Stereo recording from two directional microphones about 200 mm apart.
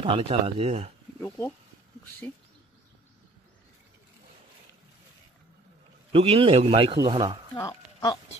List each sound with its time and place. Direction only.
0.0 s a man's voice: 30° right (ahead or behind)
6.1 s a man's voice: 30° right (ahead or behind)
7.5 s speech: 20° left (ahead or behind)